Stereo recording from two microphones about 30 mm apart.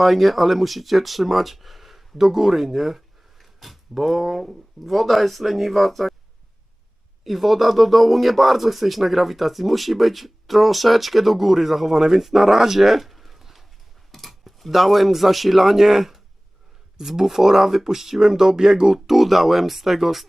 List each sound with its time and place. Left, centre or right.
0.0 s speech: centre
7.3 s speech: centre
12.8 s a sound: centre
14.1 s speech: centre
18.9 s speech: centre